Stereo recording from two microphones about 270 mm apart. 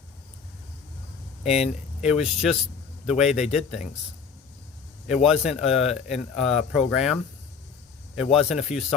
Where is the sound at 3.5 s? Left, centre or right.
Left.